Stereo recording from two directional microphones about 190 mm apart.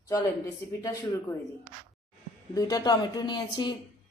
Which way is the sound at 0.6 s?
10° left (ahead or behind).